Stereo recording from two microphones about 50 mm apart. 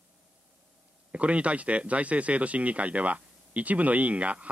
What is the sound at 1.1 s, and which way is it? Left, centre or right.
A man's voice, right.